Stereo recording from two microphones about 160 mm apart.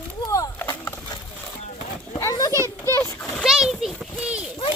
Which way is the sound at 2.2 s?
20° left (ahead or behind).